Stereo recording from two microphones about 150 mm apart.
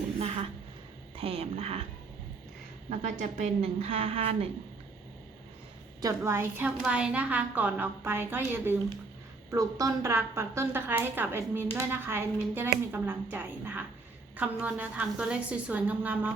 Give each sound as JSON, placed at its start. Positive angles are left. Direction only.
{"t": 0.2, "sound": "a sound", "side_deg": -40}
{"t": 1.1, "sound": "a woman's voice", "side_deg": -40}
{"t": 3.0, "sound": "a woman's voice", "side_deg": -55}
{"t": 6.0, "sound": "a woman's voice", "side_deg": -20}
{"t": 6.7, "sound": "a woman's voice", "side_deg": -5}